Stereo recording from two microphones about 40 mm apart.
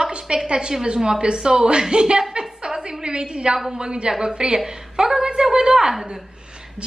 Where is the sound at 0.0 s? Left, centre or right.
Right.